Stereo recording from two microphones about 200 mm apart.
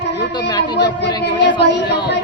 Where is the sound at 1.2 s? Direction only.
60° left (ahead or behind).